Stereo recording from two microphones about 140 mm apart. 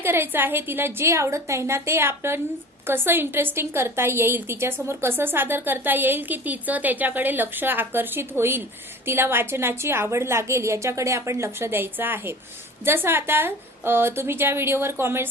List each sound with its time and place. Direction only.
0.0 s a woman's voice: 15° right (ahead or behind)